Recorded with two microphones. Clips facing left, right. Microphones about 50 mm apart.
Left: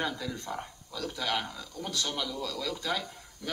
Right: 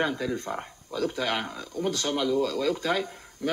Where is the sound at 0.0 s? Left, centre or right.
Right.